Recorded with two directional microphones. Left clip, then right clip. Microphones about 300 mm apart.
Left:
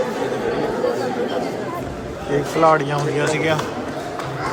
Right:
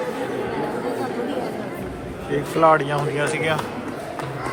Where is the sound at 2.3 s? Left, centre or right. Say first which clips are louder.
Left 1 dB; centre.